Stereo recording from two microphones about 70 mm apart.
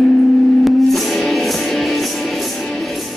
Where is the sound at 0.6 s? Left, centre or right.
Centre.